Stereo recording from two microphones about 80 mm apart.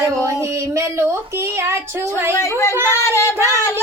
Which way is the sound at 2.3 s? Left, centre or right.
Left.